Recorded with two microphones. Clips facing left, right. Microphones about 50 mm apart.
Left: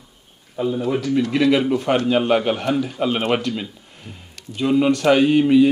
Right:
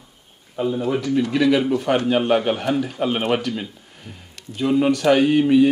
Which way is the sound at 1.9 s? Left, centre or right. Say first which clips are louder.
Left 1 dB; left.